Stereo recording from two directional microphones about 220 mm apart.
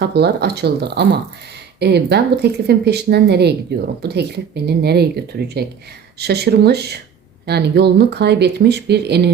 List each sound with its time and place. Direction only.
0.0 s speech: 50° right (ahead or behind)